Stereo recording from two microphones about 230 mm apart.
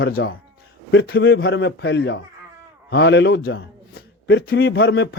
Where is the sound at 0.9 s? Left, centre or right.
Left.